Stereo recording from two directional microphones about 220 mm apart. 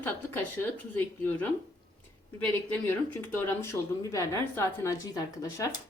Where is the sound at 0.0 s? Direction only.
10° left (ahead or behind).